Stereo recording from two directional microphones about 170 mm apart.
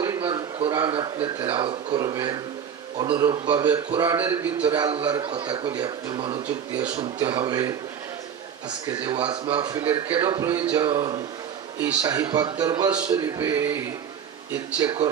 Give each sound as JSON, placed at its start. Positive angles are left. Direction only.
{"t": 0.0, "sound": "a man's voice", "side_deg": -20}
{"t": 13.1, "sound": "a sound", "side_deg": -20}
{"t": 14.8, "sound": "a man's voice", "side_deg": -25}